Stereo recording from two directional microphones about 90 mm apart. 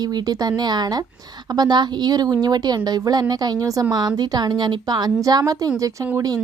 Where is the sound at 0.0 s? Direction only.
50° right (ahead or behind).